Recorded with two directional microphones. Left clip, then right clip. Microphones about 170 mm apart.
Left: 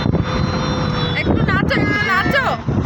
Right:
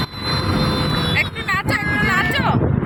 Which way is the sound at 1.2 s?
30° left (ahead or behind).